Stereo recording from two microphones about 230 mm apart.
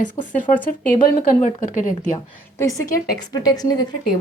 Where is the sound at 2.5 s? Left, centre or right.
Centre.